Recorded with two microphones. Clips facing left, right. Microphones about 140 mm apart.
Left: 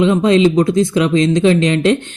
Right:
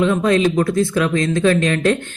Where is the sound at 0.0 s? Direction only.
20° left (ahead or behind).